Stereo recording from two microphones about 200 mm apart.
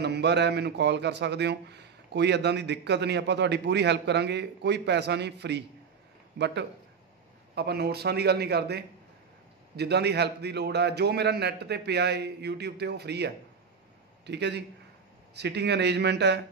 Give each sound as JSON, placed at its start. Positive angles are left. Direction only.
{"t": 0.0, "sound": "a man's voice", "side_deg": -55}